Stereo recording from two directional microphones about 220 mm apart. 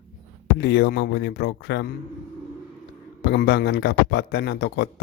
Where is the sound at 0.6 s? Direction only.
50° left (ahead or behind).